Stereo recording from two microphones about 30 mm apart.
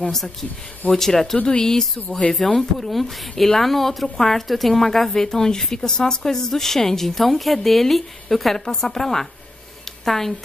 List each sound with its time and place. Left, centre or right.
0.0 s a woman's voice: centre
2.9 s a woman's voice: centre
8.5 s a woman's voice: centre